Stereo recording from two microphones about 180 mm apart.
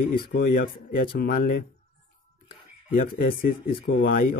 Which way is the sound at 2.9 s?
55° left (ahead or behind).